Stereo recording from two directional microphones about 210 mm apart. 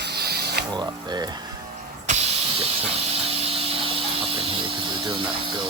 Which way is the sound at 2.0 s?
30° right (ahead or behind).